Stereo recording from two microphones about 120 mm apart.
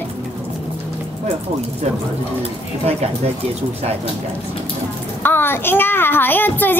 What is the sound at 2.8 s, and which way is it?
Speech, 60° right (ahead or behind).